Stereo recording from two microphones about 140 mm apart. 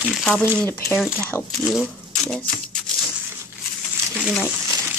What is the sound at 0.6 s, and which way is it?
Speech, 15° left (ahead or behind).